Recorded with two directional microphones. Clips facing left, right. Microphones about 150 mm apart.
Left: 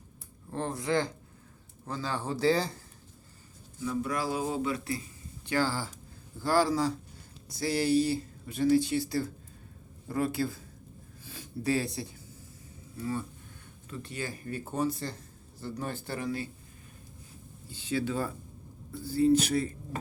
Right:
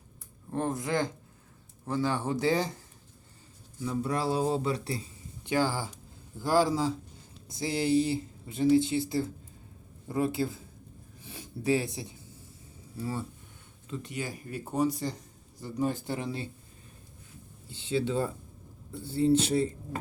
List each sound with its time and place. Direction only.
0.5 s speech: 20° right (ahead or behind)
3.8 s speech: 30° right (ahead or behind)
5.5 s speech: 15° right (ahead or behind)
17.7 s speech: 20° right (ahead or behind)